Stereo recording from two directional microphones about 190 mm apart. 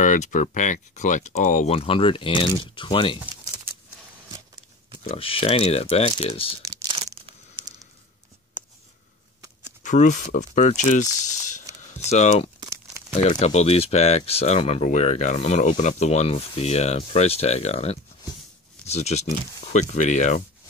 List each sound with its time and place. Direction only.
0.0 s speech: 40° left (ahead or behind)
5.0 s speech: 30° left (ahead or behind)
6.7 s crumpling: 20° right (ahead or behind)
9.8 s speech: 40° left (ahead or behind)